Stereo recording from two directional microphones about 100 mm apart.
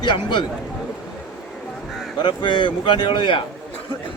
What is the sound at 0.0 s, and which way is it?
Speech, 50° left (ahead or behind).